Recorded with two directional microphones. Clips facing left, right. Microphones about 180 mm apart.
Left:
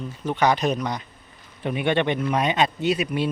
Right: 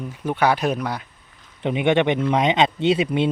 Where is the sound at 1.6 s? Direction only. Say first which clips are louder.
Right 4 dB; 20° right (ahead or behind).